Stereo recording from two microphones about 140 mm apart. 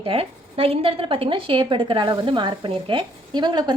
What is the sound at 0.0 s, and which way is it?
A woman's voice, 40° right (ahead or behind).